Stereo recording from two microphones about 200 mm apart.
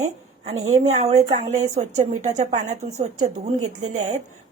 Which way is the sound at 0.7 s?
30° right (ahead or behind).